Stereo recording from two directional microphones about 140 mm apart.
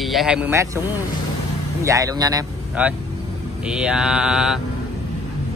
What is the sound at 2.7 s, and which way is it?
Speech, 10° right (ahead or behind).